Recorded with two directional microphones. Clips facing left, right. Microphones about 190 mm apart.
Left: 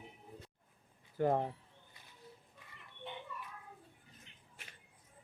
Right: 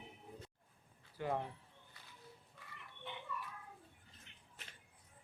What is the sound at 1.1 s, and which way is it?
Speech, 45° left (ahead or behind).